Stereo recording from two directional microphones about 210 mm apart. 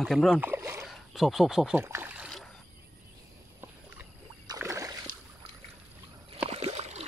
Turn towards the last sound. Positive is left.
turn(degrees=-30)  # may be behind; listen again after turning